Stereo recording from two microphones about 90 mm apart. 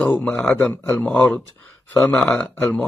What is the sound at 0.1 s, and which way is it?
Speech, 15° left (ahead or behind).